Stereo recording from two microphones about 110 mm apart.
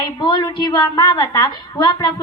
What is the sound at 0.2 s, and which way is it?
A woman's voice, 40° left (ahead or behind).